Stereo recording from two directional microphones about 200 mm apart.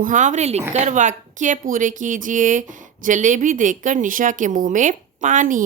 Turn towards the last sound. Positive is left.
turn(degrees=-40)  # may be behind; listen again after turning